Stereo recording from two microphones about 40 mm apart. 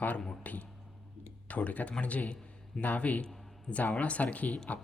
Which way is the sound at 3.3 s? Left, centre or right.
Centre.